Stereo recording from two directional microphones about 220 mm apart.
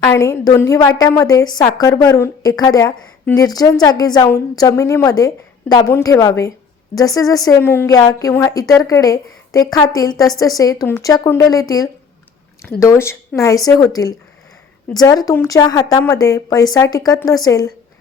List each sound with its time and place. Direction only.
0.1 s a woman's voice: 15° left (ahead or behind)
12.8 s a woman's voice: 15° left (ahead or behind)